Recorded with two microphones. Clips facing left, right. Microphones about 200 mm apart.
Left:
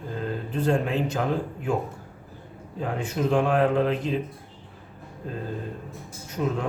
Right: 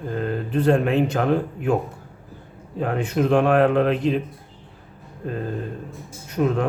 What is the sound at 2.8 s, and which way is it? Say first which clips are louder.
Speech: right 5 dB; 65° right (ahead or behind).